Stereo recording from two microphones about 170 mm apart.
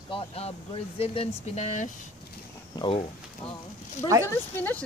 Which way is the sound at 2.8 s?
25° left (ahead or behind).